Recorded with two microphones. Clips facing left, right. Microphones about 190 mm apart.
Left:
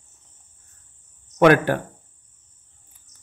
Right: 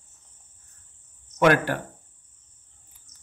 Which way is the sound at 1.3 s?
50° left (ahead or behind).